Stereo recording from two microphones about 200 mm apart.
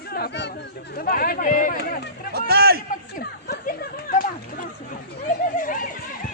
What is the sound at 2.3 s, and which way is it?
Speech, 50° right (ahead or behind).